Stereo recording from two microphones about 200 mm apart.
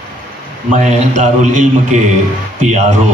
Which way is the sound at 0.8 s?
35° right (ahead or behind).